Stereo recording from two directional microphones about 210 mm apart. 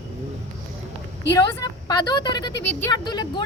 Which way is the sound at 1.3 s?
20° left (ahead or behind).